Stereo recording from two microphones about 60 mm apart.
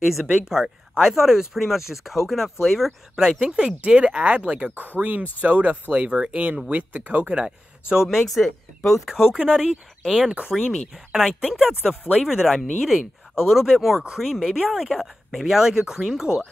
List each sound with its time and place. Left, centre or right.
0.0 s speech: centre
3.3 s speech: centre
4.7 s speech: right; by 8.1 s centre
8.1 s speech: centre
9.4 s speech: centre
10.5 s speech: centre